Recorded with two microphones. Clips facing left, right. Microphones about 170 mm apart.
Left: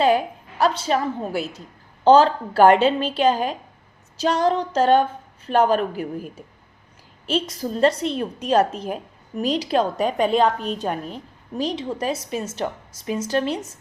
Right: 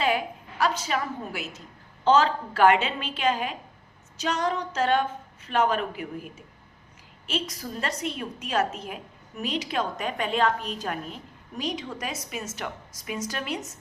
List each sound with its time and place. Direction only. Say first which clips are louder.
0.6 s a woman's voice: left 6 dB; 30° left (ahead or behind)